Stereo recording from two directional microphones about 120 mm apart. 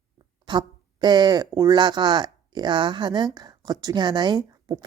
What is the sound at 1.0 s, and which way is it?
A woman's voice, 35° right (ahead or behind).